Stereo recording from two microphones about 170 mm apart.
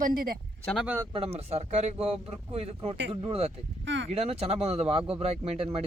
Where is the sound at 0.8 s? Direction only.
15° right (ahead or behind).